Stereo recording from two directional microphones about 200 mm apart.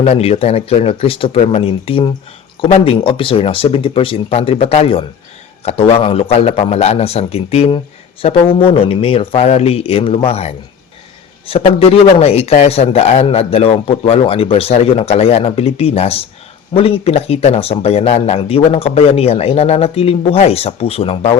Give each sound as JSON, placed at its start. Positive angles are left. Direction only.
{"t": 0.0, "sound": "a man's voice", "side_deg": 30}